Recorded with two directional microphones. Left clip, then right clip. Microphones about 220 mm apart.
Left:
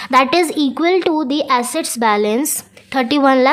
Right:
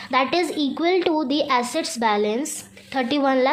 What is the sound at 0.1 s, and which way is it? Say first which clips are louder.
Speech: left 8 dB; 25° left (ahead or behind).